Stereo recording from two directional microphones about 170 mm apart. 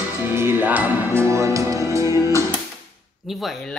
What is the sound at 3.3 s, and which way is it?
Speech, centre (ahead or behind).